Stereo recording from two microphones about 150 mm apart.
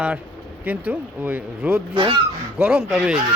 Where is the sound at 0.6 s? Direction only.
10° right (ahead or behind).